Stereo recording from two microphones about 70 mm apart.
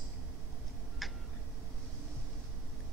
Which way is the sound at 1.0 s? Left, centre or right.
Centre.